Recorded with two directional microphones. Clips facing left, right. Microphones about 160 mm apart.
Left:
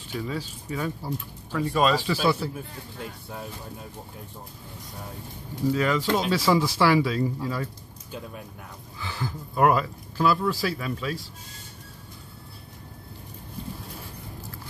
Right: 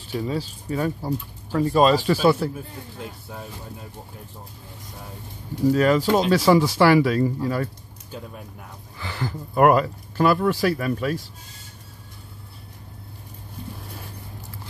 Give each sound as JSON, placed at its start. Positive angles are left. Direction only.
{"t": 0.1, "sound": "speech", "side_deg": -30}
{"t": 2.0, "sound": "speech", "side_deg": -50}
{"t": 2.5, "sound": "speech", "side_deg": 0}
{"t": 5.7, "sound": "speech", "side_deg": -45}
{"t": 8.9, "sound": "speech", "side_deg": -60}